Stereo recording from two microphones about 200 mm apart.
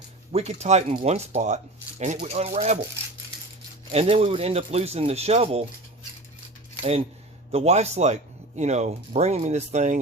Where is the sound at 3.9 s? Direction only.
30° right (ahead or behind).